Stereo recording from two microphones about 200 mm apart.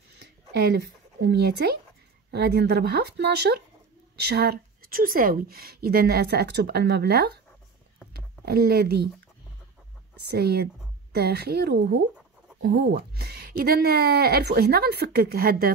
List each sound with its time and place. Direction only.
0.2 s a woman's voice: 55° right (ahead or behind)
10.2 s a woman's voice: 55° right (ahead or behind)